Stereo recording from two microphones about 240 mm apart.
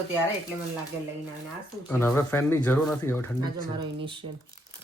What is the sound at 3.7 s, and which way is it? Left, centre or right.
Speech, right.